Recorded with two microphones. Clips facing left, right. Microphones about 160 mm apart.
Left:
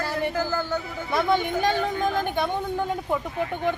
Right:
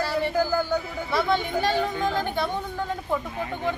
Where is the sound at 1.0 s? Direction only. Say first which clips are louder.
Left 2 dB; 15° left (ahead or behind).